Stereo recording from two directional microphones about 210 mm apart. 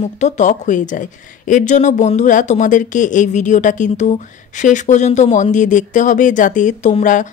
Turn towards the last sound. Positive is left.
turn(degrees=35)  # may be behind; listen again after turning